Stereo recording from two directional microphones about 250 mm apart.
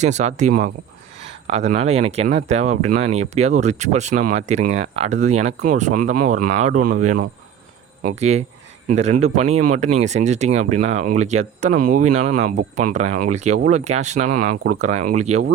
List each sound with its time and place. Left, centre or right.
0.0 s speech: right